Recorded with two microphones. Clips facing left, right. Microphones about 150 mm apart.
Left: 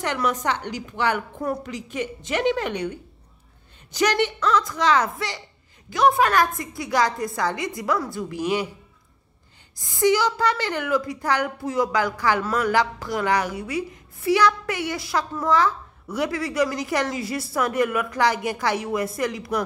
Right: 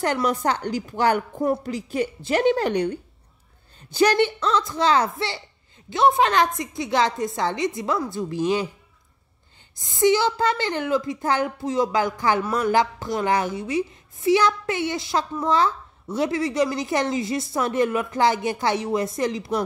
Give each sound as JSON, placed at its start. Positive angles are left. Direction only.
{"t": 0.0, "sound": "a woman's voice", "side_deg": -35}
{"t": 3.9, "sound": "a woman's voice", "side_deg": -30}
{"t": 9.8, "sound": "a woman's voice", "side_deg": -20}